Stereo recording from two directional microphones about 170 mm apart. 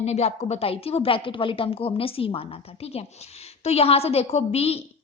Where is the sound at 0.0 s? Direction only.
40° left (ahead or behind).